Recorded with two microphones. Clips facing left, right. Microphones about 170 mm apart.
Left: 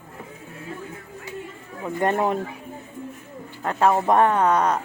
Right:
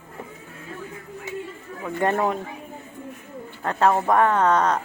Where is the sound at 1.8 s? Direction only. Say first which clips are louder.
Even; 20° left (ahead or behind).